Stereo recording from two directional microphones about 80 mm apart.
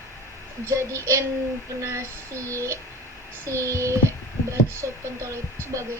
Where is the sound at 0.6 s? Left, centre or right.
Right.